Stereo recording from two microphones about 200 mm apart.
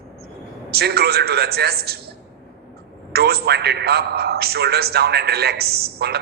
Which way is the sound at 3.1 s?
55° right (ahead or behind).